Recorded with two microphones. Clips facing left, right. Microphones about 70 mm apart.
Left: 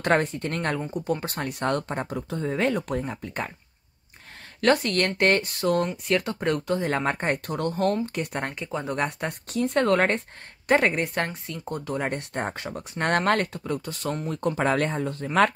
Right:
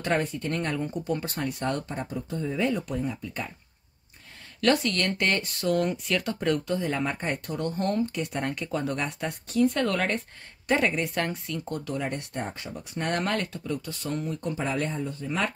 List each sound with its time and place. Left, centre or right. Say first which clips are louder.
0.0 s speech: left 4 dB; left
2.3 s speech: left 2 dB; left
2.6 s speech: left 2 dB; left
3.0 s speech: left 1 dB; left
4.6 s speech: left 3 dB; left
5.6 s speech: left 1 dB; left
8.1 s speech: even; left
8.6 s speech: right 1 dB; centre
8.9 s speech: left 3 dB; left
12.0 s speech: left 3 dB; left
14.3 s speech: left 10 dB; left